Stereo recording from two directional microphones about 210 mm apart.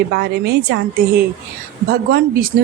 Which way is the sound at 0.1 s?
50° right (ahead or behind).